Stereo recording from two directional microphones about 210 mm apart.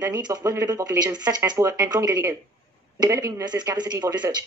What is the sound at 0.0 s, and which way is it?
Speech, 15° right (ahead or behind).